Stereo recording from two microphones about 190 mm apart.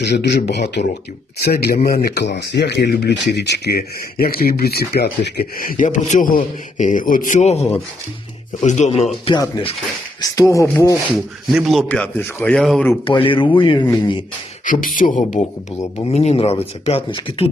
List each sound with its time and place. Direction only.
0.0 s a man's voice: 60° left (ahead or behind); by 10.9 s 15° left (ahead or behind)
11.5 s a man's voice: centre (ahead or behind)
13.1 s speech: 30° left (ahead or behind)
14.6 s a man's voice: 45° left (ahead or behind); by 17.5 s 30° left (ahead or behind)